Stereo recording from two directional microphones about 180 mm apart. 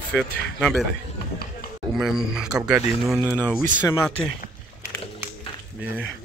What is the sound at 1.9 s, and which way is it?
Speech, centre (ahead or behind).